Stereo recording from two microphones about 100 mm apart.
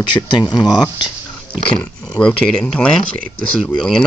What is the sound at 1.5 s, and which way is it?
Speech, 10° left (ahead or behind).